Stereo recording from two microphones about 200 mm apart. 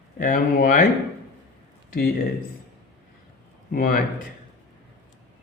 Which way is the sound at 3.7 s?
45° left (ahead or behind).